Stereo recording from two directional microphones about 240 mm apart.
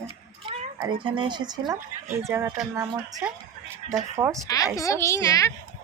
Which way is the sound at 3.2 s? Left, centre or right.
Centre.